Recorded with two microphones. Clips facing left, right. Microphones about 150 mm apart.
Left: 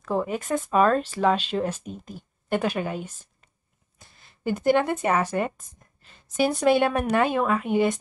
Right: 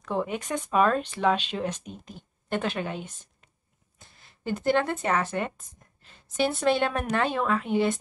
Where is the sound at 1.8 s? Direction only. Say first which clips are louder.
Left 5 dB; 45° left (ahead or behind).